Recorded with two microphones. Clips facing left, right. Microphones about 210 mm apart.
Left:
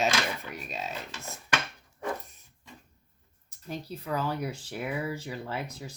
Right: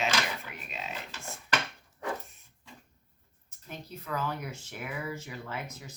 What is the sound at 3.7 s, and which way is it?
Speech, 30° left (ahead or behind).